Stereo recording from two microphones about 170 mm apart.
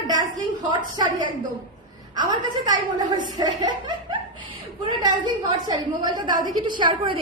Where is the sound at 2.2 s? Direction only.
25° right (ahead or behind).